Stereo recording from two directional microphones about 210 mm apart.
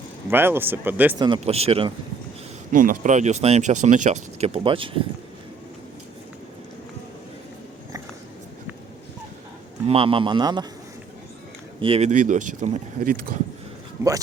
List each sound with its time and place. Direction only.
0.3 s speech: 10° right (ahead or behind)
1.2 s speech: 25° right (ahead or behind)
2.7 s speech: 40° right (ahead or behind); by 5.0 s 25° right (ahead or behind)
9.8 s speech: 25° right (ahead or behind)
11.8 s speech: 30° right (ahead or behind)